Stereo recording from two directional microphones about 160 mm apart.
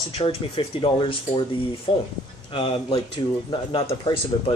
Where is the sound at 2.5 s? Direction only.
30° left (ahead or behind).